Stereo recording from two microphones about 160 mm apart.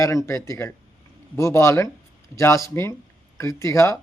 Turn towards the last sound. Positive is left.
turn(degrees=15)  # may be behind; listen again after turning